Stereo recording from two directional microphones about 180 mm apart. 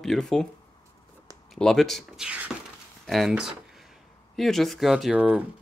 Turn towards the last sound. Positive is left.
turn(degrees=-5)  # may be behind; listen again after turning